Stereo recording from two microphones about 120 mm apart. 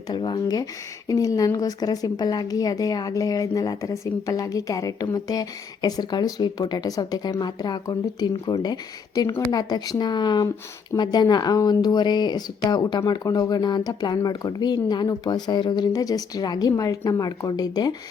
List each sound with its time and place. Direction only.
0.1 s a woman's voice: 40° left (ahead or behind)